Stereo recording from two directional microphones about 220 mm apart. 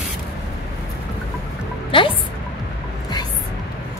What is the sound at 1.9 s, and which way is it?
Music, 25° left (ahead or behind).